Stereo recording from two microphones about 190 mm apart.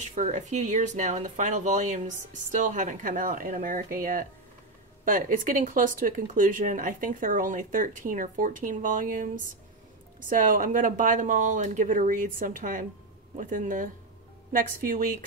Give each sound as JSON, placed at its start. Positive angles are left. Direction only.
{"t": 0.0, "sound": "speech", "side_deg": -40}